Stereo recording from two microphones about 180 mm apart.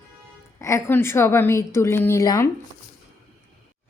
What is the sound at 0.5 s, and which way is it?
A woman's voice, 15° left (ahead or behind).